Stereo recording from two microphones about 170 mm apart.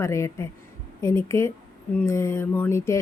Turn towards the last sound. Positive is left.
turn(degrees=15)  # may be behind; listen again after turning